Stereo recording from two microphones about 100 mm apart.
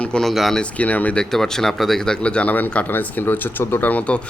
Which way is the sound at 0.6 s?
15° left (ahead or behind).